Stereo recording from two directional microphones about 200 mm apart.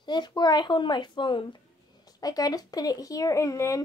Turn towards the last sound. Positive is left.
turn(degrees=15)  # may be behind; listen again after turning